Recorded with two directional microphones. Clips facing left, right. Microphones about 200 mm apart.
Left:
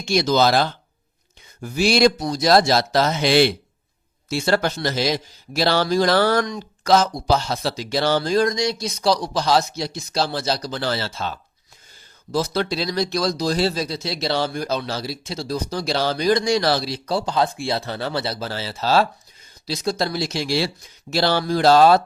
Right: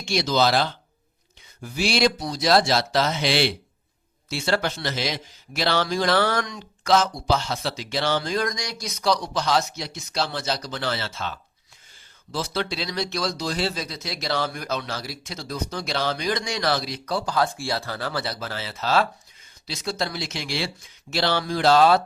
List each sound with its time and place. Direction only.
0.0 s a man's voice: 45° left (ahead or behind)